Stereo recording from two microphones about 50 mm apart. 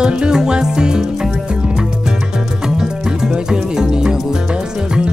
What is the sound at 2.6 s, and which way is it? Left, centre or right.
Music, centre.